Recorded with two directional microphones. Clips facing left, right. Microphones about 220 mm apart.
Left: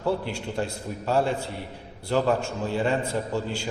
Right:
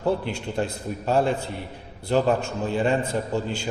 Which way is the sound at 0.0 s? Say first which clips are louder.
Right 2 dB; 20° right (ahead or behind).